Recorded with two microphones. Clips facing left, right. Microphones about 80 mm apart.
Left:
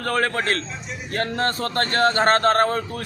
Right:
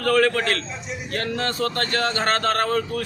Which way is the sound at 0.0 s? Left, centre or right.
Left.